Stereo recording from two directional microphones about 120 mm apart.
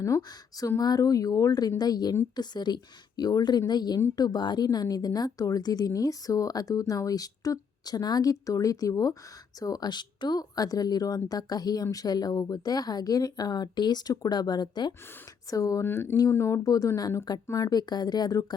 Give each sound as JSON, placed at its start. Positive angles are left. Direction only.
{"t": 0.0, "sound": "a woman's voice", "side_deg": 30}